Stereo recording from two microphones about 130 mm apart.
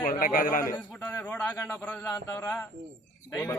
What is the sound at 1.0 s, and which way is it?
Speech, 15° left (ahead or behind).